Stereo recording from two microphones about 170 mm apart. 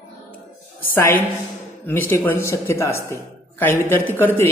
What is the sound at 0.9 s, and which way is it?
Speech, 10° left (ahead or behind).